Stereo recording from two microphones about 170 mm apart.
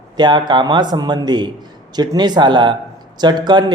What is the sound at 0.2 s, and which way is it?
Speech, 25° right (ahead or behind).